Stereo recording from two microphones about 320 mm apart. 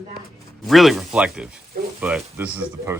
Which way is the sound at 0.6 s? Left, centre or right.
Centre.